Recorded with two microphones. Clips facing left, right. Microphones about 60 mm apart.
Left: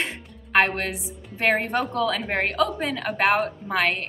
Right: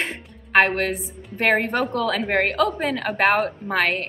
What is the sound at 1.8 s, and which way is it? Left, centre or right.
A woman's voice, right.